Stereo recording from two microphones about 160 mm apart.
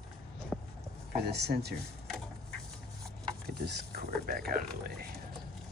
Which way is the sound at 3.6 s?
80° right.